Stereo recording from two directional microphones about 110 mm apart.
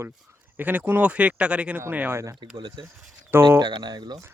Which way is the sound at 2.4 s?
45° right (ahead or behind).